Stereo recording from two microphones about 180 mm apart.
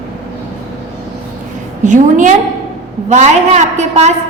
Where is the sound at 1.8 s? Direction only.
45° right (ahead or behind).